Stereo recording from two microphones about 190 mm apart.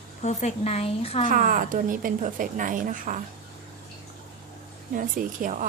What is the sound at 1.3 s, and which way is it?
A woman's voice, 45° right (ahead or behind).